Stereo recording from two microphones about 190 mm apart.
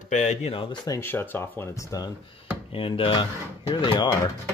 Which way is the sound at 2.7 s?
30° left (ahead or behind).